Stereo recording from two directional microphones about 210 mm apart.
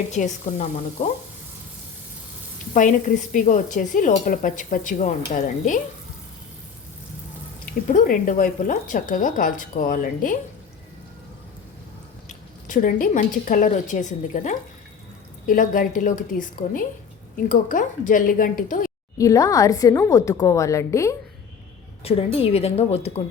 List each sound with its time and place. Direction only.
0.1 s speech: 35° left (ahead or behind)
3.3 s speech: 35° left (ahead or behind)
7.6 s speech: 40° left (ahead or behind)
12.3 s a woman's voice: 40° left (ahead or behind)
19.1 s speech: 15° left (ahead or behind)
22.0 s a woman's voice: 25° left (ahead or behind)